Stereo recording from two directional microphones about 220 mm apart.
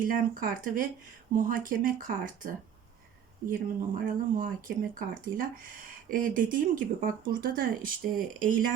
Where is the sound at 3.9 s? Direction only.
40° right (ahead or behind).